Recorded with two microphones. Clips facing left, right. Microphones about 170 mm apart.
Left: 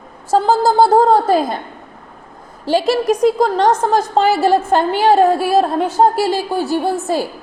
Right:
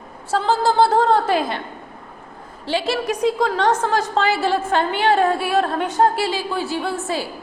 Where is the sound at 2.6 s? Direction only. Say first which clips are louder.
Left 7 dB; 45° left (ahead or behind).